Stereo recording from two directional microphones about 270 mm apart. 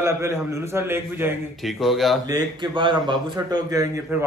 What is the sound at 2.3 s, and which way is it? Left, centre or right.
A man's voice, centre.